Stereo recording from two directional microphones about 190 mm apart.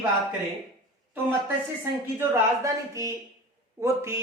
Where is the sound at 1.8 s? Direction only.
15° right (ahead or behind).